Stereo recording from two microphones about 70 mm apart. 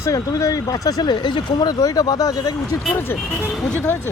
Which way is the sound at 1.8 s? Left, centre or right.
Left.